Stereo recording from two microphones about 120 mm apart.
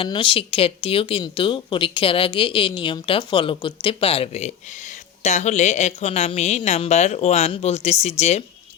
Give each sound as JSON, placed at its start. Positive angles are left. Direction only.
{"t": 0.0, "sound": "a woman's voice", "side_deg": 45}